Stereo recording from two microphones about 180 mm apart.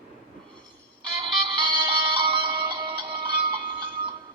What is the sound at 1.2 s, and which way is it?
Music, 25° right (ahead or behind).